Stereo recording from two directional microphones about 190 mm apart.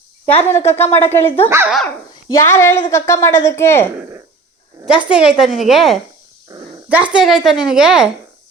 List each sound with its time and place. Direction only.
0.3 s a woman's voice: 10° left (ahead or behind)
1.5 s speech: 15° right (ahead or behind)
2.3 s a woman's voice: 15° left (ahead or behind)
5.0 s a woman's voice: 5° right (ahead or behind)
6.5 s dog: 15° right (ahead or behind)
6.8 s a woman's voice: 5° right (ahead or behind)